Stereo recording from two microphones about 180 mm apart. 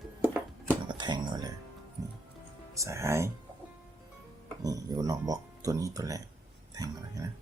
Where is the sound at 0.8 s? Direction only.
25° right (ahead or behind).